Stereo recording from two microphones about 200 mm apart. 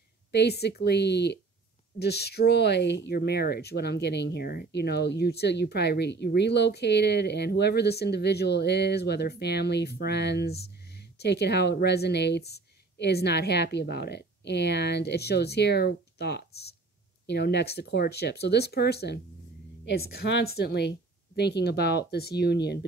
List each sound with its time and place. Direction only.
0.3 s speech: 55° left (ahead or behind)